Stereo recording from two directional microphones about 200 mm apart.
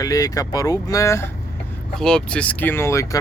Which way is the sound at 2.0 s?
5° left (ahead or behind).